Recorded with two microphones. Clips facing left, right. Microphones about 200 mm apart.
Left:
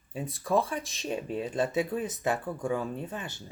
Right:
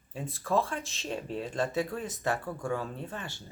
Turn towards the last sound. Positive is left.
turn(degrees=15)  # may be behind; listen again after turning